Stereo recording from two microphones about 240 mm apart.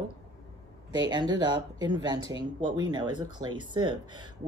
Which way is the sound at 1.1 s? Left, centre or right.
Centre.